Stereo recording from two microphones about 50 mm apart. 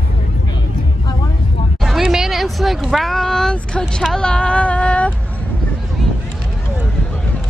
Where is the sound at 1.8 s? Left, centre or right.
Centre.